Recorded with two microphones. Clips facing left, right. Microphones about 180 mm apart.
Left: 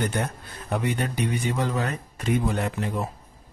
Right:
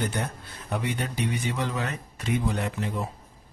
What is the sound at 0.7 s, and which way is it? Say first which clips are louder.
Speech: left 3 dB; 50° left (ahead or behind).